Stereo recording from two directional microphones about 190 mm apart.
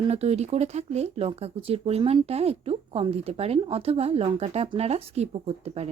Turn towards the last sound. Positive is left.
turn(degrees=-35)  # may be behind; listen again after turning